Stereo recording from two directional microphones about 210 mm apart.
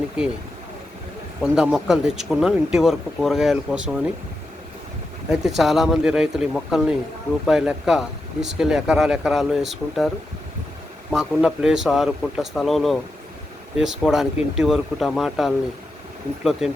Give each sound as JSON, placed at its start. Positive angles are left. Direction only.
{"t": 1.4, "sound": "speech", "side_deg": -5}
{"t": 5.3, "sound": "speech", "side_deg": 0}
{"t": 11.1, "sound": "speech", "side_deg": -5}
{"t": 14.1, "sound": "speech", "side_deg": 0}